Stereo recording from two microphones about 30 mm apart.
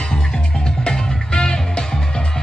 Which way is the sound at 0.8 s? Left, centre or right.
Left.